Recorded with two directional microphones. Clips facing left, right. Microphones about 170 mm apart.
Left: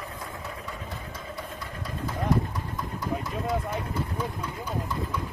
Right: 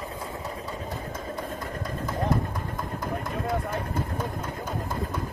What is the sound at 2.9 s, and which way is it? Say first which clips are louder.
Vehicle: left 1 dB; 50° right (ahead or behind).